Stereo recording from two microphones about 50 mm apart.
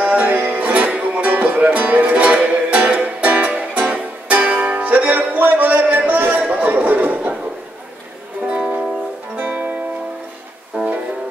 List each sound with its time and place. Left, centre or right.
0.0 s music: right
6.4 s a sound: right
9.4 s music: right